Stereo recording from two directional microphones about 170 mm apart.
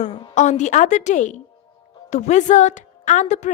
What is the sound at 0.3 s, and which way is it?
A woman's voice, 45° left (ahead or behind).